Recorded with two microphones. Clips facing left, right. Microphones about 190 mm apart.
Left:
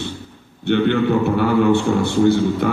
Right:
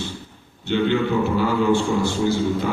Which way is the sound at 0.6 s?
60° left (ahead or behind).